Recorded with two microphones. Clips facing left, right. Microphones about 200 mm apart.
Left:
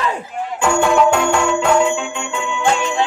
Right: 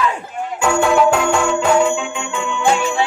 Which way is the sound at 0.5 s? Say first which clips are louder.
Even; centre (ahead or behind).